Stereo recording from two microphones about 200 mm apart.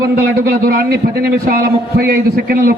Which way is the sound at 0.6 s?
50° right (ahead or behind).